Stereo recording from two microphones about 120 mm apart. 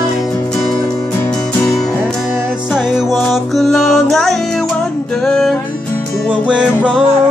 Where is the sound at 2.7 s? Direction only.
5° right (ahead or behind).